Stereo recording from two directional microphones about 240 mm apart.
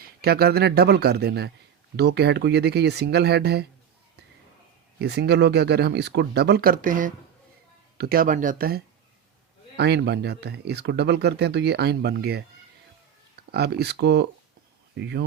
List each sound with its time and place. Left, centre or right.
0.0 s speech: right
4.9 s speech: right